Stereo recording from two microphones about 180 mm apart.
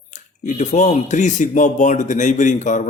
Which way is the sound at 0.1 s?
45° left (ahead or behind).